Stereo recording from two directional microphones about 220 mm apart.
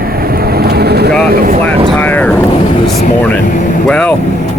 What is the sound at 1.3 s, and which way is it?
Speech, 40° right (ahead or behind).